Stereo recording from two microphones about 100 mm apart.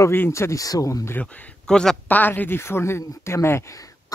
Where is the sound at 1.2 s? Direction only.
5° left (ahead or behind).